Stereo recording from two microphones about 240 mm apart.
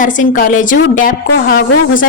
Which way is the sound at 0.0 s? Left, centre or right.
Left.